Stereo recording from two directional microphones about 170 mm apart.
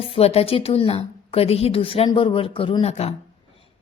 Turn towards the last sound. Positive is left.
turn(degrees=40)  # may be behind; listen again after turning